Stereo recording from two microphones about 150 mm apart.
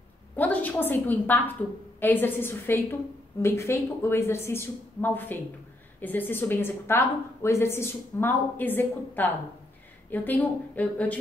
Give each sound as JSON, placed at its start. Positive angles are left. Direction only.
{"t": 0.4, "sound": "a woman's voice", "side_deg": 10}